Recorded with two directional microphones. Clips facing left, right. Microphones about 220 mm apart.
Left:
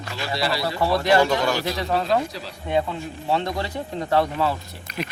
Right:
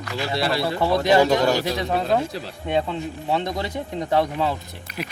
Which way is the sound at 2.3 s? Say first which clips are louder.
Right 3 dB; 50° right (ahead or behind).